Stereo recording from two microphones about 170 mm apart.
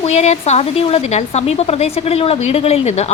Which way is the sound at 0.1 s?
40° left (ahead or behind).